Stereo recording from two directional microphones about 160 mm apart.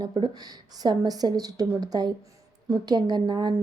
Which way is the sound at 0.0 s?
25° right (ahead or behind).